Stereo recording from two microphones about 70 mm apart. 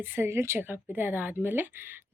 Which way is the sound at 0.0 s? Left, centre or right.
Right.